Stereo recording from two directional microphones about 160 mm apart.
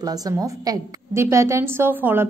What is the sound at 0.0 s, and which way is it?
A woman's voice, 20° right (ahead or behind).